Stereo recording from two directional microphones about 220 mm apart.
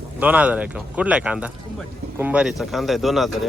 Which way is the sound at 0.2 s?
5° right (ahead or behind).